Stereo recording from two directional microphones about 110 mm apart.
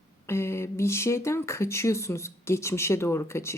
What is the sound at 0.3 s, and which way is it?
Speech, 25° left (ahead or behind).